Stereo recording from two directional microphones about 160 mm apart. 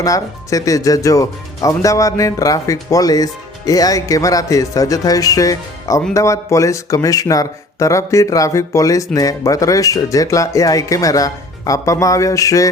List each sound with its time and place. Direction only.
0.0 s speech: 20° left (ahead or behind)